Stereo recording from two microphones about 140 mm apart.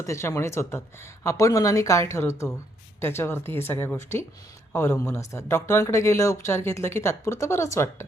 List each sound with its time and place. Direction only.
0.0 s speech: 20° left (ahead or behind)